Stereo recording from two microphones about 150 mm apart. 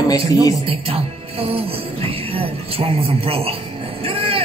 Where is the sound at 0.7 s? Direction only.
40° right (ahead or behind).